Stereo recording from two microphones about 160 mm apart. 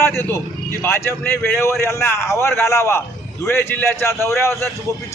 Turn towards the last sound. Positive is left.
turn(degrees=15)  # may be behind; listen again after turning